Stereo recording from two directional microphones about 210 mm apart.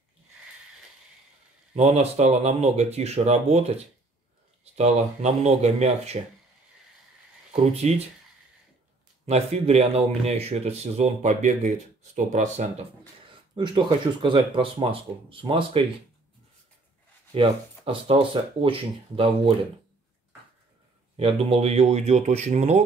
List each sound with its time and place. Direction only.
1.8 s speech: 30° right (ahead or behind)
7.6 s speech: 30° right (ahead or behind)
9.2 s speech: 30° right (ahead or behind)
13.3 s speech: 25° right (ahead or behind)
17.3 s speech: 25° right (ahead or behind)
21.2 s speech: 25° right (ahead or behind)